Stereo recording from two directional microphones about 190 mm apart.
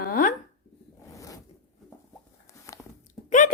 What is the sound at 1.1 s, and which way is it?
Zipper, 15° left (ahead or behind).